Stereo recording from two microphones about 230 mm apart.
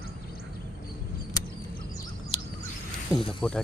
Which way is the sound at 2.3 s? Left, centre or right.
Left.